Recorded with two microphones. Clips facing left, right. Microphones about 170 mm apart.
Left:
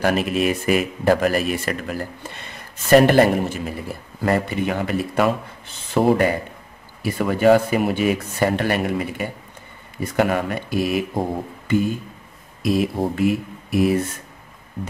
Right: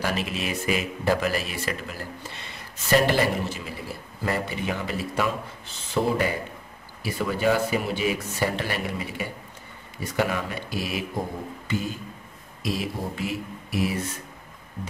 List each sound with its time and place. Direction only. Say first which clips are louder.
0.0 s speech: left 9 dB; 55° left (ahead or behind)
11.6 s a sound: left 10 dB; 55° left (ahead or behind)
12.6 s speech: left 9 dB; 55° left (ahead or behind)